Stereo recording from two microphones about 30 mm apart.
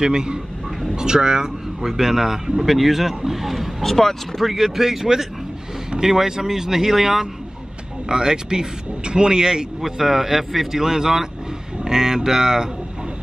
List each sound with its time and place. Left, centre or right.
0.0 s speech: right
1.8 s speech: centre
3.8 s speech: centre
4.4 s speech: centre
5.9 s speech: centre
8.1 s speech: right
9.8 s speech: centre